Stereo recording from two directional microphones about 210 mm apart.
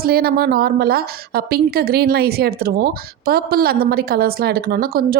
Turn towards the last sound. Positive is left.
turn(degrees=-45)  # may be behind; listen again after turning